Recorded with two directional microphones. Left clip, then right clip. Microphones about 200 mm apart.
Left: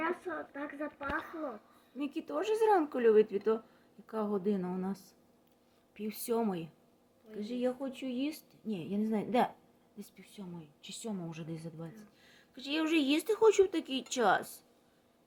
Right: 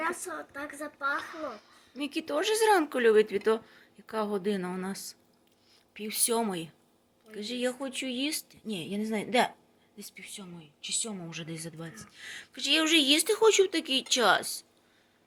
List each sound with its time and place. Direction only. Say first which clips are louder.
0.0 s a woman's voice: right 3 dB; 15° left (ahead or behind)
1.1 s a woman's voice: right 3 dB; 5° left (ahead or behind)